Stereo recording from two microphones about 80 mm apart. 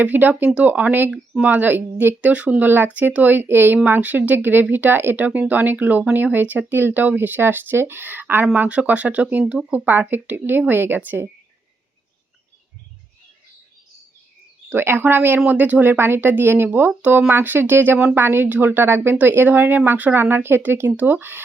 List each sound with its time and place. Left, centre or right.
0.0 s speech: right
14.7 s speech: right